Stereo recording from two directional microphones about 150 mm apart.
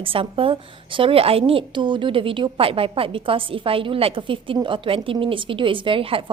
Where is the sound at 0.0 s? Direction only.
35° right (ahead or behind).